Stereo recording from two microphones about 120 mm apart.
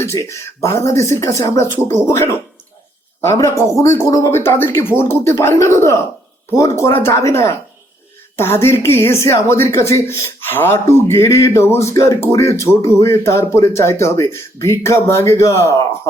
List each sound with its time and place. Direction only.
0.0 s speech: 25° left (ahead or behind)